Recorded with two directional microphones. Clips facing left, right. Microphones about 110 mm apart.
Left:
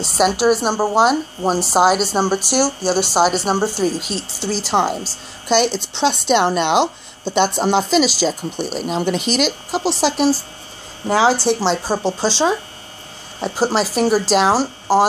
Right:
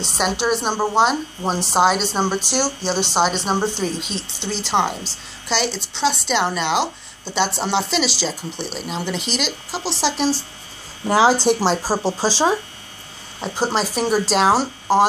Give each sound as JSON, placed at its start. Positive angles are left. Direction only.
{"t": 0.0, "sound": "speech", "side_deg": 10}
{"t": 11.1, "sound": "speech", "side_deg": -15}
{"t": 13.4, "sound": "speech", "side_deg": 5}